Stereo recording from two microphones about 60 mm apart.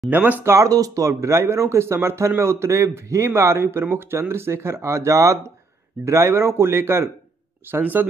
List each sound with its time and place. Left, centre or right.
0.1 s speech: right
0.4 s speech: right
7.7 s speech: right